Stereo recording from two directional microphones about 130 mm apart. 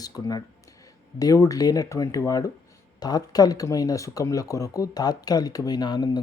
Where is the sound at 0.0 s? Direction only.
30° left (ahead or behind).